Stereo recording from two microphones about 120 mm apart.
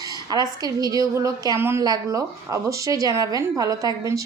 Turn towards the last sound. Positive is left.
turn(degrees=-30)  # may be behind; listen again after turning